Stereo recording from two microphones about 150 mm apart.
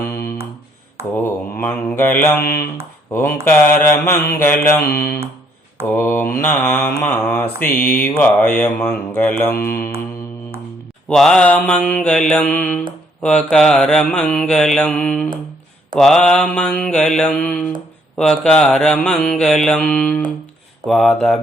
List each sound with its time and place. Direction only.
1.1 s mantra: 10° left (ahead or behind)
9.6 s mantra: 85° left
11.1 s mantra: 5° left (ahead or behind)